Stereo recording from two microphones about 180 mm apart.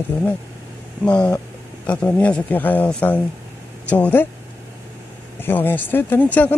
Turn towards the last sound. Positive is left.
turn(degrees=10)  # may be behind; listen again after turning